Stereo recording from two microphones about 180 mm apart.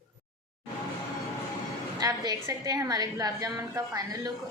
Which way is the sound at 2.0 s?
20° right (ahead or behind).